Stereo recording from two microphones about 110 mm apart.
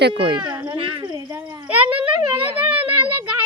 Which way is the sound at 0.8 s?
50° right (ahead or behind).